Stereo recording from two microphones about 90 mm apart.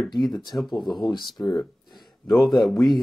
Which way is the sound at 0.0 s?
Centre (ahead or behind).